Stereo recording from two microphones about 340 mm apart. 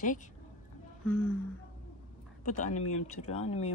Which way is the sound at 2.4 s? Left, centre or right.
Left.